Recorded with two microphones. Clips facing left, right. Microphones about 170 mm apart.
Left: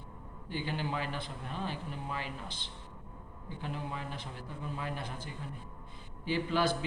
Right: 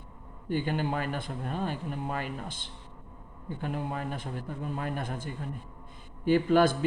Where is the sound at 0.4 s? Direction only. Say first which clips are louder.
Right 7 dB; 50° right (ahead or behind).